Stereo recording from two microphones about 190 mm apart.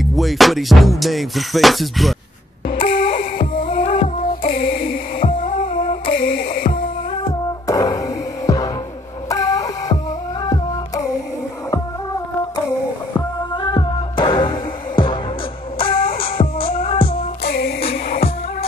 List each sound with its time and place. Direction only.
0.0 s music: centre (ahead or behind)
2.7 s music: 50° left (ahead or behind)
3.9 s music: 30° left (ahead or behind)
4.6 s a sound: 50° left (ahead or behind)
6.1 s music: 50° left (ahead or behind)
7.2 s beatboxing: 20° left (ahead or behind)
9.3 s a sound: 20° left (ahead or behind)
13.6 s music: 25° left (ahead or behind)
15.8 s music: 30° left (ahead or behind)
17.5 s music: 55° left (ahead or behind)